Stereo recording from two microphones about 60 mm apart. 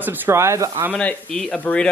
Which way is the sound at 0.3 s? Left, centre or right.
Right.